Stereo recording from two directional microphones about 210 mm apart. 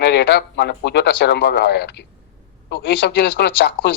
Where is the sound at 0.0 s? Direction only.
50° left (ahead or behind).